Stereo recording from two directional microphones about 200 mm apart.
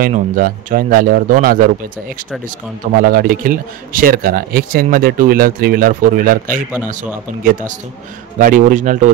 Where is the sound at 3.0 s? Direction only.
45° right (ahead or behind).